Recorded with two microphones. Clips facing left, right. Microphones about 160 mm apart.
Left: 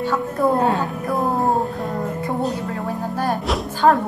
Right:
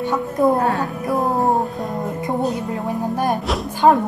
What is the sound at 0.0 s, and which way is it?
A woman's voice, 20° right (ahead or behind).